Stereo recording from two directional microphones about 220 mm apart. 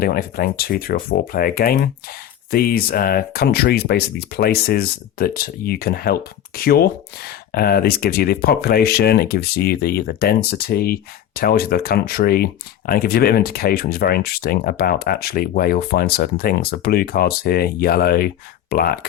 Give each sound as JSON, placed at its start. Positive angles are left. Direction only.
{"t": 0.0, "sound": "speech", "side_deg": 45}